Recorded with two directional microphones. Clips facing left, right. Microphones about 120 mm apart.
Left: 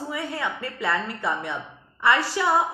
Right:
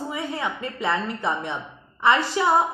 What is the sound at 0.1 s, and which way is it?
A woman's voice, 20° right (ahead or behind).